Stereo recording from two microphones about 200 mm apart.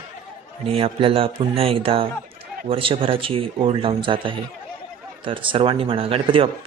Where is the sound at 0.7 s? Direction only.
30° right (ahead or behind).